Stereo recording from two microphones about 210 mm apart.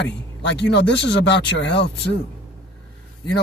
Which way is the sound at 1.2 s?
60° left (ahead or behind).